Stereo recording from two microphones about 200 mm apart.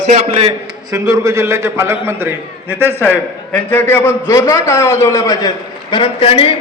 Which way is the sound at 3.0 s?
10° left (ahead or behind).